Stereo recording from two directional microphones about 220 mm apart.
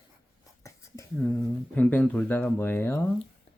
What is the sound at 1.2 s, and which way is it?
Speech, 5° left (ahead or behind).